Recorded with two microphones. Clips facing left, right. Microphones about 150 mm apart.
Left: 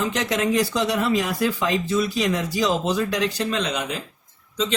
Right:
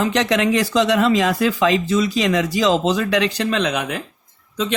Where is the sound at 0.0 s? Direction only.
75° right (ahead or behind).